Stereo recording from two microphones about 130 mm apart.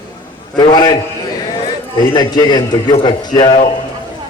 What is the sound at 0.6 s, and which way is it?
Speech, 35° left (ahead or behind).